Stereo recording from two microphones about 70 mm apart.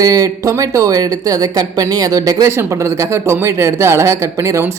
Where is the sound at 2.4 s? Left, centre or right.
Right.